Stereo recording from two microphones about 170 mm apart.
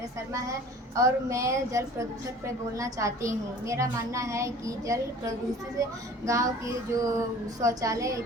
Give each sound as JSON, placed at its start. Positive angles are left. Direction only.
{"t": 0.9, "sound": "a woman's voice", "side_deg": -20}